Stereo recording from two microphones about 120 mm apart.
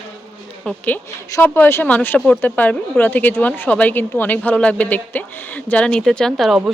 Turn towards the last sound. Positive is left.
turn(degrees=0)  # may be behind; listen again after turning